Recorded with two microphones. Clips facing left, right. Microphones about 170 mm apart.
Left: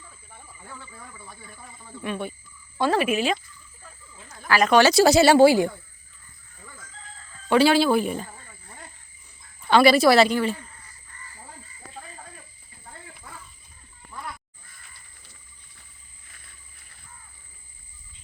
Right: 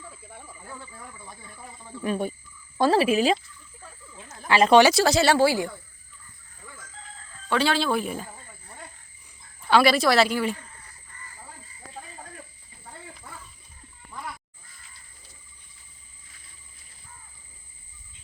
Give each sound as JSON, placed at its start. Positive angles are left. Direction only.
{"t": 1.2, "sound": "speech", "side_deg": -15}
{"t": 2.0, "sound": "speech", "side_deg": -40}
{"t": 4.3, "sound": "a sound", "side_deg": -25}
{"t": 4.9, "sound": "speech", "side_deg": 10}
{"t": 5.4, "sound": "a woman's voice", "side_deg": 20}
{"t": 7.4, "sound": "speech", "side_deg": 10}
{"t": 9.6, "sound": "speech", "side_deg": 0}